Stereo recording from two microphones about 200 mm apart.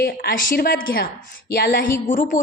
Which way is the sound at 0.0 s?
50° left (ahead or behind).